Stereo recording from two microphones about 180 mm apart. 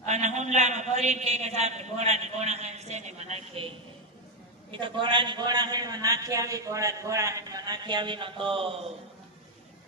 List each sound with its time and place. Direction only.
0.0 s a man's voice: 40° right (ahead or behind)
4.7 s a man's voice: 25° right (ahead or behind)